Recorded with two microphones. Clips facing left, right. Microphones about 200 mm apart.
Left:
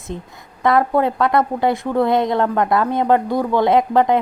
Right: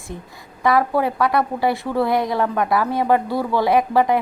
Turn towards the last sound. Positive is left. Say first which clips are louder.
# left 2 dB
turn(degrees=20)  # may be behind; listen again after turning